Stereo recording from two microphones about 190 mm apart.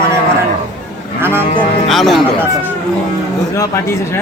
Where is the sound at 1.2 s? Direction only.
10° right (ahead or behind).